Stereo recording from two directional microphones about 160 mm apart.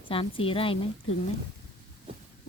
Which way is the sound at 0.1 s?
35° left (ahead or behind).